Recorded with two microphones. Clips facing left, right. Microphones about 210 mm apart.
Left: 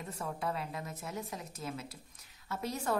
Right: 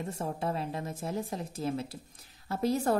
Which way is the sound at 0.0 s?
30° right (ahead or behind).